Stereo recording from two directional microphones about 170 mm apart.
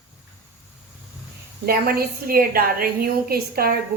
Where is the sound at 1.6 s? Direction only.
65° right (ahead or behind).